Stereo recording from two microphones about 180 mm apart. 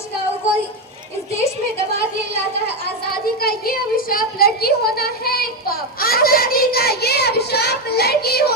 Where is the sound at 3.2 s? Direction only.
55° left (ahead or behind).